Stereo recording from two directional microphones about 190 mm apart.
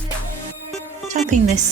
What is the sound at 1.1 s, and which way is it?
Music, 40° right (ahead or behind).